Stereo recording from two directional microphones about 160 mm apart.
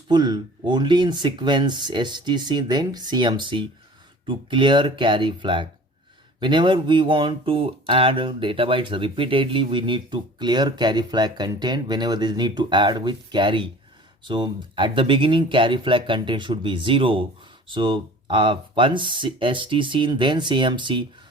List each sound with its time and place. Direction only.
0.1 s speech: 25° right (ahead or behind)